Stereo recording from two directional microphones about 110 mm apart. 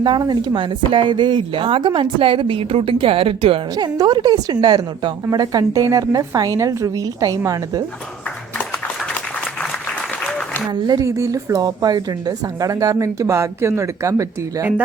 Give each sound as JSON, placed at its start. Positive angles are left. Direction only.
{"t": 0.0, "sound": "speech", "side_deg": -40}
{"t": 3.8, "sound": "a woman's voice", "side_deg": -40}
{"t": 10.8, "sound": "a woman's voice", "side_deg": -35}